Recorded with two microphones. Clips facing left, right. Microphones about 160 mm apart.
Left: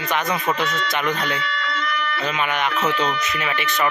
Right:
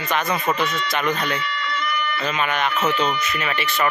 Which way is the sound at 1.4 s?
90° left.